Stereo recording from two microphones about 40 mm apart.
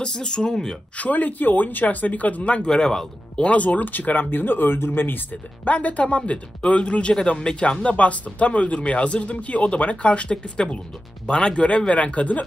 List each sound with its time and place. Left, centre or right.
0.0 s speech: centre
0.9 s speech: left
2.7 s speech: centre
3.4 s speech: left
5.7 s speech: left
7.8 s speech: left